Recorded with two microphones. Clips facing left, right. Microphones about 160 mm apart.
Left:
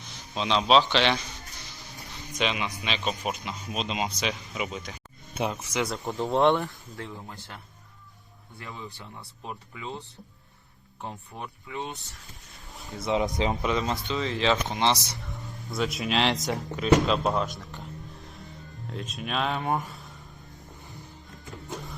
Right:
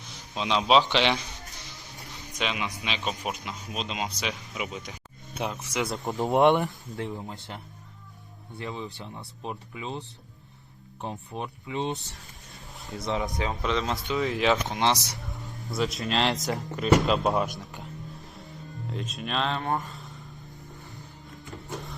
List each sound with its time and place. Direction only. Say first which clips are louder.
0.3 s a man's voice: even; 10° right (ahead or behind)
2.3 s speech: left 2 dB; centre (ahead or behind)
6.1 s speech: right 2 dB; 20° right (ahead or behind)
11.0 s speech: right 4 dB; 20° right (ahead or behind)
12.8 s speech: right 1 dB; centre (ahead or behind)
13.1 s speech: left 4 dB; 20° left (ahead or behind)
13.6 s speech: left 1 dB; 5° left (ahead or behind)
17.7 s whispering: right 1 dB; centre (ahead or behind)
18.9 s speech: even; centre (ahead or behind)